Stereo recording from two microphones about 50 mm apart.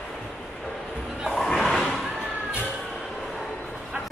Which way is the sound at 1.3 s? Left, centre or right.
Centre.